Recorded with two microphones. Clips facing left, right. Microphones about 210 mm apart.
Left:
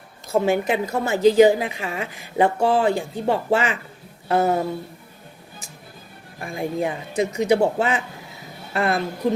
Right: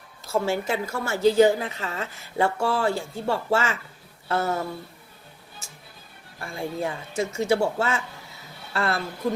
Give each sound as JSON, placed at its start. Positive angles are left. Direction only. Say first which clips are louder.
{"t": 0.3, "sound": "a woman's voice", "louder": "left 5 dB", "side_deg": 20}
{"t": 6.4, "sound": "a woman's voice", "louder": "left 5 dB", "side_deg": 15}